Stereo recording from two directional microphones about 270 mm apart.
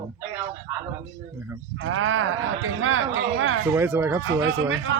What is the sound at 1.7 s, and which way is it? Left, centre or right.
Speech, right.